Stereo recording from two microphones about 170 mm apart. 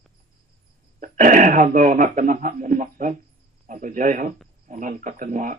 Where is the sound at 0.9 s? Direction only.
50° right (ahead or behind).